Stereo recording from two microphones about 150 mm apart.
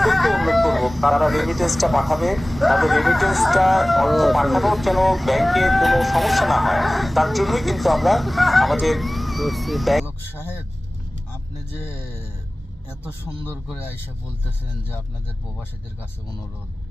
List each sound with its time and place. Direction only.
0.0 s speech: centre (ahead or behind)
10.2 s speech: 15° left (ahead or behind)
11.8 s speech: 15° left (ahead or behind)
13.4 s speech: 15° left (ahead or behind)